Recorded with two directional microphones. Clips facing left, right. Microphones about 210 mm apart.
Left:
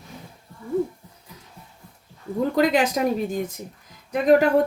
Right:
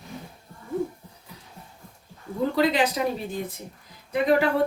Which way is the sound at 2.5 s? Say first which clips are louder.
Left 2 dB; 45° left (ahead or behind).